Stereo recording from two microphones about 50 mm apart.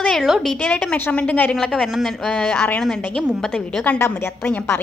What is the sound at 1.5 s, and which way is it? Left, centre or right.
Speech, centre.